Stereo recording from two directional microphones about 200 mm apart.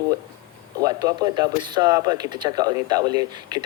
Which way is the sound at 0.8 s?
20° right (ahead or behind).